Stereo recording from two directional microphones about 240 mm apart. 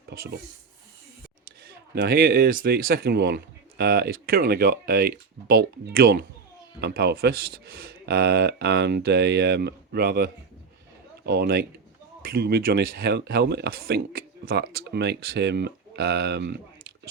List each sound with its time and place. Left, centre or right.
0.1 s speech: right
2.0 s a man's voice: right